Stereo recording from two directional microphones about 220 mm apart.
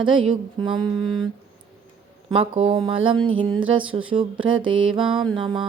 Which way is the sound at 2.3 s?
25° right (ahead or behind).